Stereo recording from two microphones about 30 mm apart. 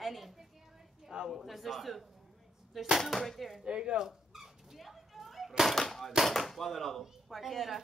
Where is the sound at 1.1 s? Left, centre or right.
Right.